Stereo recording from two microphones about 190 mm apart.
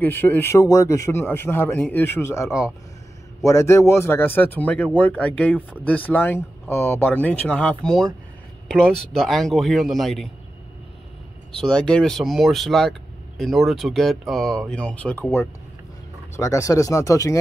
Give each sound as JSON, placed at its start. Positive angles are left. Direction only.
{"t": 0.0, "sound": "a man's voice", "side_deg": 10}
{"t": 11.7, "sound": "a man's voice", "side_deg": 5}